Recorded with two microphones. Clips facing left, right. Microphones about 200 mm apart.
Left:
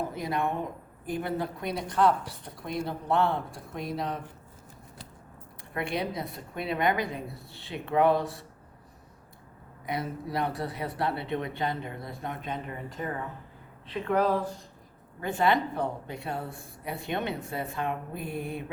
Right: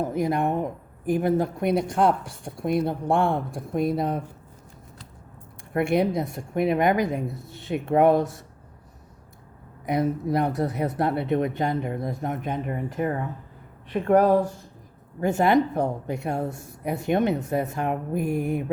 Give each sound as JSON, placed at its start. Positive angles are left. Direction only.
{"t": 0.1, "sound": "a woman's voice", "side_deg": -50}
{"t": 5.7, "sound": "a woman's voice", "side_deg": -50}
{"t": 9.8, "sound": "a woman's voice", "side_deg": -45}